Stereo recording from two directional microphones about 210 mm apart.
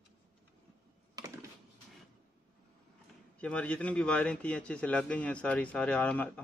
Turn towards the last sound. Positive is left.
turn(degrees=5)  # may be behind; listen again after turning